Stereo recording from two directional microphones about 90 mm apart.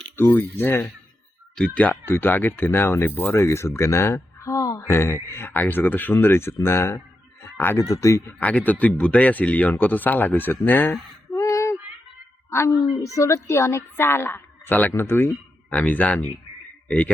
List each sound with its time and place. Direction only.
0.2 s speech: 20° left (ahead or behind)
7.4 s a sound: 25° left (ahead or behind)
7.8 s speech: 35° left (ahead or behind)
8.3 s speech: 15° left (ahead or behind)
11.3 s child singing: 35° left (ahead or behind)
12.5 s a woman's voice: 30° left (ahead or behind)